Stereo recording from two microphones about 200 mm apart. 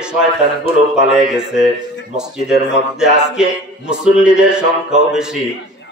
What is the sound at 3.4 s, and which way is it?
Speech, 5° right (ahead or behind).